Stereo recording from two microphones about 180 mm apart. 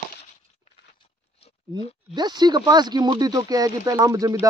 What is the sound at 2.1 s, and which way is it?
Speech, 25° right (ahead or behind).